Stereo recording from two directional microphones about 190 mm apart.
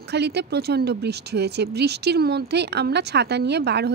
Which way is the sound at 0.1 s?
60° right (ahead or behind).